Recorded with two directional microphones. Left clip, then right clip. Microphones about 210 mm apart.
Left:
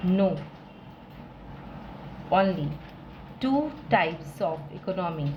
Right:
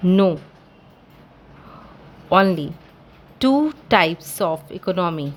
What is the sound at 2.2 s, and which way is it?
A woman's voice, 60° right (ahead or behind).